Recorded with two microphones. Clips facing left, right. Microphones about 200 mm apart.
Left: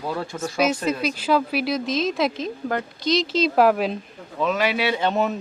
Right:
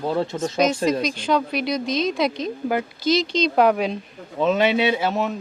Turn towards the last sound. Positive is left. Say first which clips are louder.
# left 1 dB
turn(degrees=-5)  # may be behind; listen again after turning